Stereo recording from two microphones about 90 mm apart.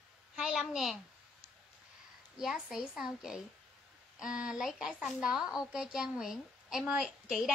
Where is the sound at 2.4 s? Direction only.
5° right (ahead or behind).